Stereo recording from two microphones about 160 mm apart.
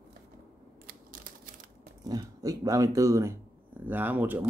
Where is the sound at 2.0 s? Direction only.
25° right (ahead or behind).